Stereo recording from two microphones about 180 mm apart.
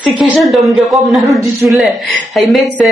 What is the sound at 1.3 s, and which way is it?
Speech, 15° right (ahead or behind).